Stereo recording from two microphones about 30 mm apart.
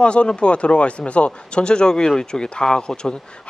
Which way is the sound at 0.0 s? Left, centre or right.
Left.